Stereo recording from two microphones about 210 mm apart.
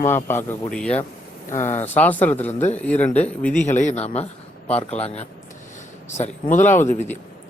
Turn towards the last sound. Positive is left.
turn(degrees=10)  # may be behind; listen again after turning